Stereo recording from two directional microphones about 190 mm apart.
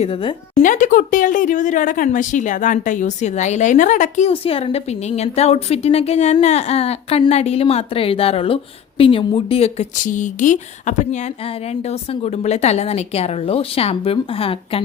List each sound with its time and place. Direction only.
0.0 s speech: 30° left (ahead or behind)
0.6 s a woman's voice: 40° left (ahead or behind)
4.3 s a woman's voice: 30° left (ahead or behind)
12.2 s a woman's voice: 35° left (ahead or behind)